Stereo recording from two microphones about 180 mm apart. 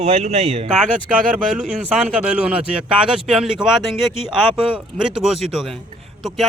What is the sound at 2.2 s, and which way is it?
Speech, 5° right (ahead or behind).